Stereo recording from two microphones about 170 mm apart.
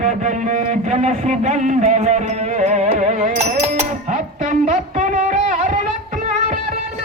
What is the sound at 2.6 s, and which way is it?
Music, 40° right (ahead or behind).